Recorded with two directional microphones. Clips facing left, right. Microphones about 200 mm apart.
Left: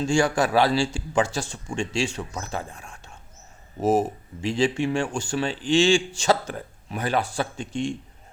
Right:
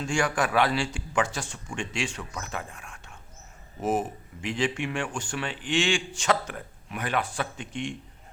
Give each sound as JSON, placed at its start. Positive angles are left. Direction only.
{"t": 0.0, "sound": "speech", "side_deg": 25}